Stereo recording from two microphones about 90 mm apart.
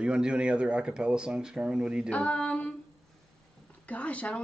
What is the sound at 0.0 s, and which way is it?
Speech, 10° right (ahead or behind).